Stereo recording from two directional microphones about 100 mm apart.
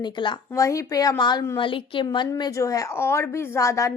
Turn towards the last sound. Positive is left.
turn(degrees=35)  # may be behind; listen again after turning